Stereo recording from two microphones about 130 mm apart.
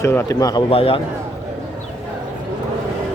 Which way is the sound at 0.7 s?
45° left (ahead or behind).